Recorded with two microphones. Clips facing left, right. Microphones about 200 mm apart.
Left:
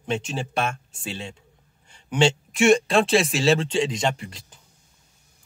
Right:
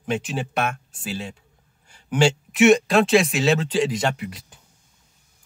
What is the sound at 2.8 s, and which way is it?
Speech, 30° left (ahead or behind).